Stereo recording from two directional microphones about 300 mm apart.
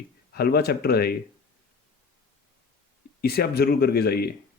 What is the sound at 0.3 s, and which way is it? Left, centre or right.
Speech, left.